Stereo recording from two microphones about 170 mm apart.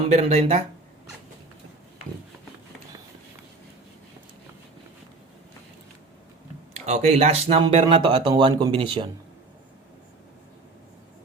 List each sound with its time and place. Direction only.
0.1 s speech: 40° right (ahead or behind)
6.7 s speech: 40° right (ahead or behind)